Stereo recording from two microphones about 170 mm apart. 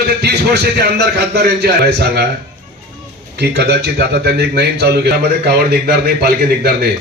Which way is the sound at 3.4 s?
75° right (ahead or behind).